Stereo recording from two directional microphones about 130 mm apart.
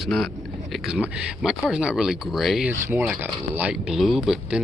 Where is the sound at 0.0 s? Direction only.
Centre (ahead or behind).